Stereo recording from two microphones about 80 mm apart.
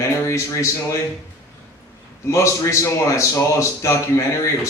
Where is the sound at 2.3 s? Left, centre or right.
Left.